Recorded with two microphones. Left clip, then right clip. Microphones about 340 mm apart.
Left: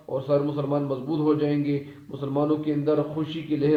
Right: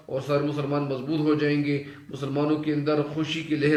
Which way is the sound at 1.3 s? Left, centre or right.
Centre.